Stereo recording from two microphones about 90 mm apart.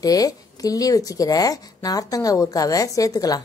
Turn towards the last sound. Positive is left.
turn(degrees=40)  # may be behind; listen again after turning